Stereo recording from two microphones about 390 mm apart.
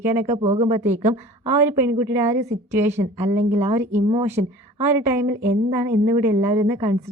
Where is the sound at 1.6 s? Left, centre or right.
Centre.